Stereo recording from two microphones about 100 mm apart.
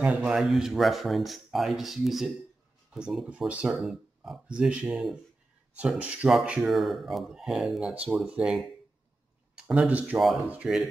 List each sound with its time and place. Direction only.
0.0 s speech: 10° right (ahead or behind)
9.7 s speech: 15° right (ahead or behind)
10.1 s speech: centre (ahead or behind)
10.5 s speech: 10° right (ahead or behind)